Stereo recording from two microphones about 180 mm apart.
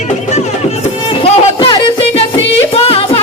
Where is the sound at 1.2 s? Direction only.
30° left (ahead or behind).